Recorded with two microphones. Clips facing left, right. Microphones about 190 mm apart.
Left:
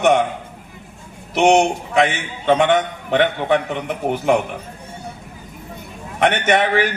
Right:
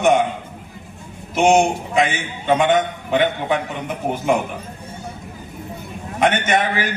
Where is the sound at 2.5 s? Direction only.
65° left (ahead or behind).